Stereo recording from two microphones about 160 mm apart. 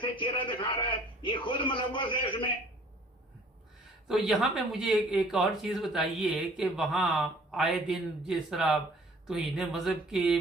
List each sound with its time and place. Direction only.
0.0 s a man's voice: 30° left (ahead or behind)
4.1 s speech: 5° right (ahead or behind)